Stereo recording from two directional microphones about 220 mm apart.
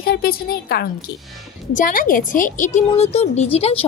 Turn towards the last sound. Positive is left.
turn(degrees=30)  # may be behind; listen again after turning